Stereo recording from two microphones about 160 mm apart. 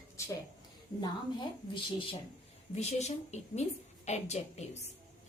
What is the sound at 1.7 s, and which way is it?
Speech, 35° left (ahead or behind).